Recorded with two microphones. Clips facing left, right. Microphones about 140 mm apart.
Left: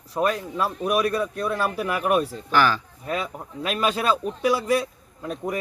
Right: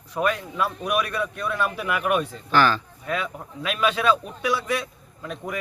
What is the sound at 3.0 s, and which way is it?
A man's voice, 35° left (ahead or behind).